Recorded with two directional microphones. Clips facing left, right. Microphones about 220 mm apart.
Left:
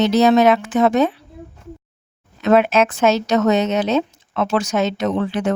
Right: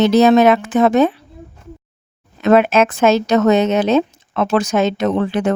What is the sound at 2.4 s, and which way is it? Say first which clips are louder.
A woman's voice: right 2 dB; 50° right (ahead or behind).